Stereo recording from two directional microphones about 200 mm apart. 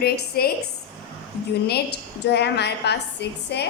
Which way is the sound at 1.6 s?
55° left (ahead or behind).